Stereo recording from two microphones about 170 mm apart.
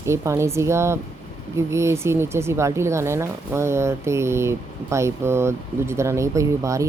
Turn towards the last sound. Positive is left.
turn(degrees=-20)  # may be behind; listen again after turning